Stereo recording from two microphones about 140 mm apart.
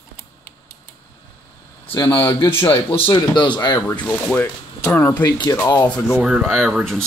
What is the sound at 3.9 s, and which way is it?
Speech, 15° left (ahead or behind).